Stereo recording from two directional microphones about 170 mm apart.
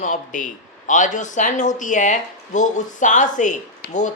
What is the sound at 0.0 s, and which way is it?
A man's voice, 50° left (ahead or behind).